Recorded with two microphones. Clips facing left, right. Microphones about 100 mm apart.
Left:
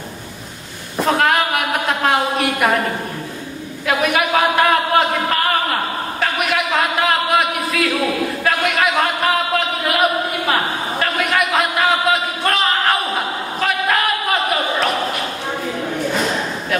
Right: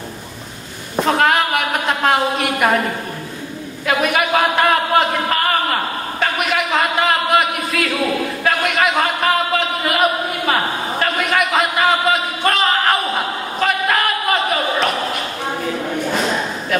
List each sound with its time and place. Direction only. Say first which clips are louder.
1.0 s a man's voice: even; centre (ahead or behind)
3.8 s a man's voice: even; centre (ahead or behind)
13.6 s a sound: right 1 dB; centre (ahead or behind)